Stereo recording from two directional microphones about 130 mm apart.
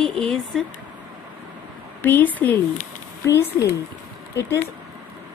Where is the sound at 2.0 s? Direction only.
15° left (ahead or behind).